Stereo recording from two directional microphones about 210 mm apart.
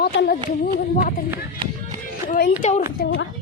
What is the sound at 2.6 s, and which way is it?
Speech, 35° left (ahead or behind).